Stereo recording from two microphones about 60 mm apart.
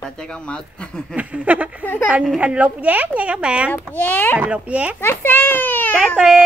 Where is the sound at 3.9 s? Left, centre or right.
Left.